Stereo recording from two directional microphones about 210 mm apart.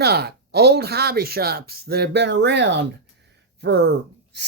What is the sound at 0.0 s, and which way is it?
Speech, 50° right (ahead or behind).